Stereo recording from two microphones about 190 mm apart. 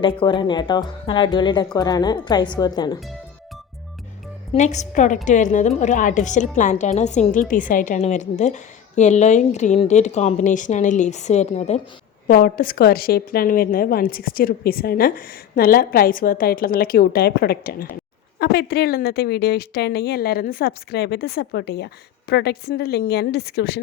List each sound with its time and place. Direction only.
0.0 s a woman's voice: 25° left (ahead or behind)
4.5 s a woman's voice: 40° left (ahead or behind)
12.3 s a woman's voice: 50° left (ahead or behind)